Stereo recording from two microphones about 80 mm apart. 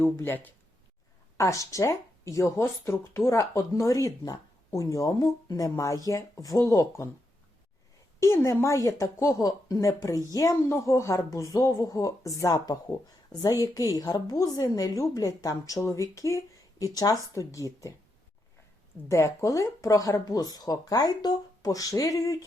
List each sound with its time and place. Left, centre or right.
0.0 s speech: left
1.4 s speech: left
8.2 s speech: left
9.5 s speech: left
19.0 s speech: left